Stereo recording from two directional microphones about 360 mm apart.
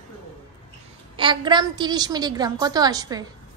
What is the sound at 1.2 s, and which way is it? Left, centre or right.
A woman's voice, centre.